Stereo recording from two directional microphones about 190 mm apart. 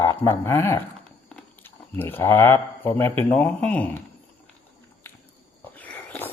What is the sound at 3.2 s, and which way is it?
Snoring, 10° left (ahead or behind).